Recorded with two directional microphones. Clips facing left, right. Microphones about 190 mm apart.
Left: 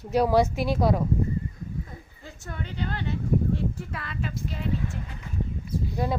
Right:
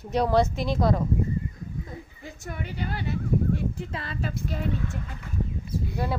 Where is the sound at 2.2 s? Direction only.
10° right (ahead or behind).